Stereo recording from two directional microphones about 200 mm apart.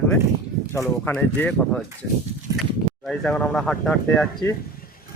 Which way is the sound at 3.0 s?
5° left (ahead or behind).